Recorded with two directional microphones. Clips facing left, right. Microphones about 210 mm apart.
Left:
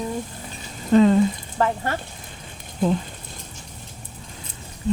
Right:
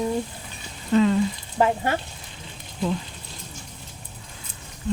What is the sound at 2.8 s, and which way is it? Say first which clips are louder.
Speech: left 4 dB; 50° left (ahead or behind).